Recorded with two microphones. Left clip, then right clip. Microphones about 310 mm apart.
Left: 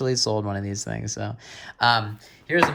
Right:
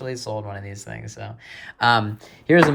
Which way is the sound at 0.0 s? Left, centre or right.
Centre.